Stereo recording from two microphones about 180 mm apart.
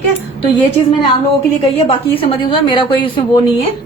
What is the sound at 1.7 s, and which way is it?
A woman's voice, 30° left (ahead or behind).